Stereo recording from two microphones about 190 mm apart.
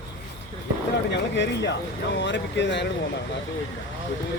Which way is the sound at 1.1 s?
65° left (ahead or behind).